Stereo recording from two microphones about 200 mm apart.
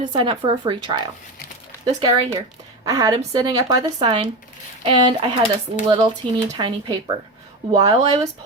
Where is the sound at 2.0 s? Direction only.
20° right (ahead or behind).